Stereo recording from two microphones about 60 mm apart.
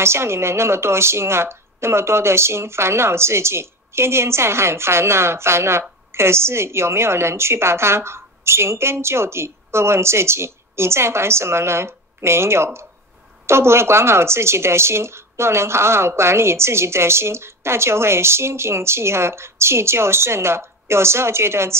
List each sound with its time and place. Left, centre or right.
0.0 s speech: right